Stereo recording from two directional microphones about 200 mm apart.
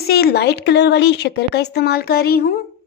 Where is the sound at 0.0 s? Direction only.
50° left (ahead or behind).